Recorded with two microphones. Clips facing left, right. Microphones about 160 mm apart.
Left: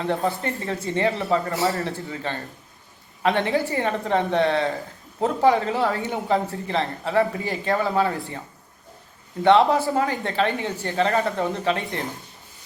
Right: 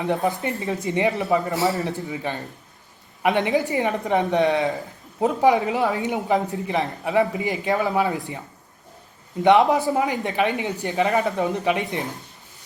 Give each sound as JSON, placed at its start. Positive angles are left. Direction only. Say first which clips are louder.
{"t": 0.0, "sound": "speech", "louder": "right 1 dB", "side_deg": -15}
{"t": 9.4, "sound": "speech", "louder": "even", "side_deg": -15}